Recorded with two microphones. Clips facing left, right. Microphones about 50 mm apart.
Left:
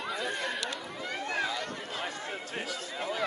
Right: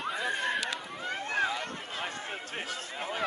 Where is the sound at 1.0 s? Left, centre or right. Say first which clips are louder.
Right 2 dB; right.